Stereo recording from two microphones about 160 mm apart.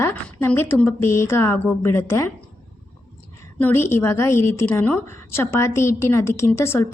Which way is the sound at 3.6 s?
15° left (ahead or behind).